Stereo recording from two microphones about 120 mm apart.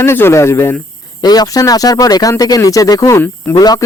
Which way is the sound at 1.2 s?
35° left (ahead or behind).